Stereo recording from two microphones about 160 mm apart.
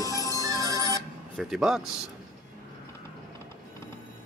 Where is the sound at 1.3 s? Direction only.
Centre (ahead or behind).